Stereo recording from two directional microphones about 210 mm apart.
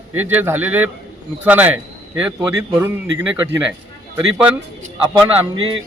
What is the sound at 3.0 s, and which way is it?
Speech, 60° right (ahead or behind).